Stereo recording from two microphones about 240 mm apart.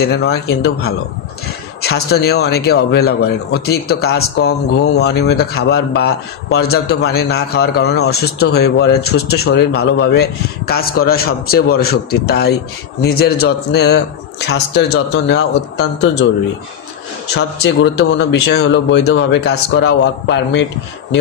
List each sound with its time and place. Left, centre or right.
0.0 s speech: left
17.3 s speech: left